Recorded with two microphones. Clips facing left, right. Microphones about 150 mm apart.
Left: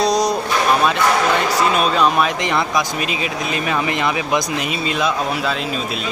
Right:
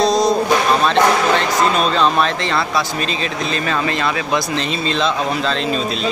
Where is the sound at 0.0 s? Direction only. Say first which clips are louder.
Right 2 dB; 15° left (ahead or behind).